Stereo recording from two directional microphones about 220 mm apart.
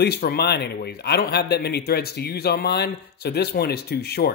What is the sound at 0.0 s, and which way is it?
Speech, 45° left (ahead or behind).